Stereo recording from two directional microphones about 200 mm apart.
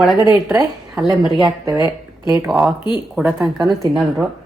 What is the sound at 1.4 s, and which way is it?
Speech, 15° right (ahead or behind).